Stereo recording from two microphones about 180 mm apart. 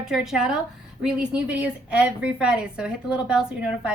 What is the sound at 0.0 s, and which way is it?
A woman's voice, 5° right (ahead or behind).